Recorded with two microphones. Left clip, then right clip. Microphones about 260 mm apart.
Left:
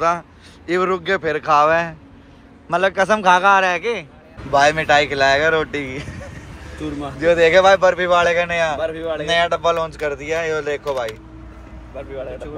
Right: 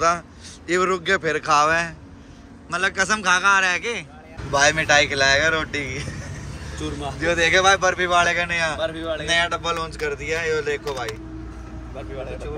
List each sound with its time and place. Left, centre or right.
0.7 s speech: centre
8.8 s speech: centre
9.2 s speech: centre